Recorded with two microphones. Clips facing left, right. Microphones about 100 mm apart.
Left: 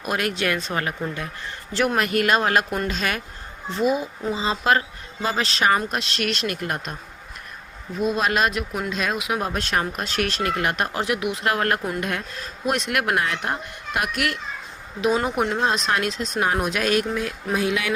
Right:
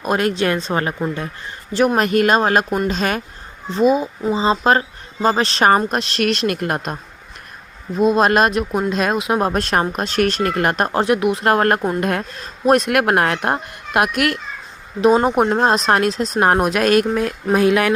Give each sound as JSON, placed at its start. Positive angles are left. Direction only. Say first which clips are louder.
{"t": 0.0, "sound": "speech", "louder": "right 6 dB", "side_deg": -30}
{"t": 1.7, "sound": "a man's voice", "louder": "right 6 dB", "side_deg": -15}
{"t": 2.0, "sound": "speech", "louder": "right 4 dB", "side_deg": -40}
{"t": 3.7, "sound": "speech", "louder": "right 6 dB", "side_deg": -25}
{"t": 7.9, "sound": "speech", "louder": "right 8 dB", "side_deg": -45}
{"t": 15.0, "sound": "speech", "louder": "right 8 dB", "side_deg": -40}
{"t": 16.4, "sound": "speech", "louder": "right 7 dB", "side_deg": -55}